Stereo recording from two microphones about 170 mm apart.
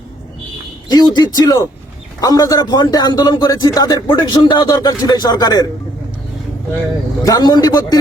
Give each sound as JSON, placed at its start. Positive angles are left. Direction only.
{"t": 0.9, "sound": "a man's voice", "side_deg": 25}
{"t": 7.3, "sound": "a man's voice", "side_deg": 25}